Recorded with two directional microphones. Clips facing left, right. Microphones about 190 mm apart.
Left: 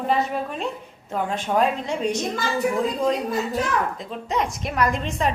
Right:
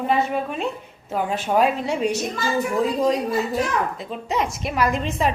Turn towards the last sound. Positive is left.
turn(degrees=-5)  # may be behind; listen again after turning